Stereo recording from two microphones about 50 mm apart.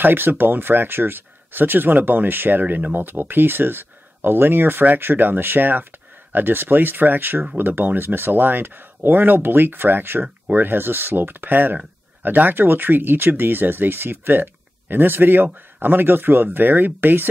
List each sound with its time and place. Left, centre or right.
0.0 s speech: right